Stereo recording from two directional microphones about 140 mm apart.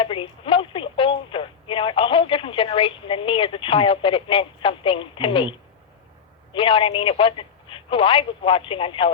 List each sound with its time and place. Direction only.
0.0 s speech: 40° left (ahead or behind)